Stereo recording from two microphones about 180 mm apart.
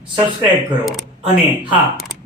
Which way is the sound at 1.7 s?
Centre (ahead or behind).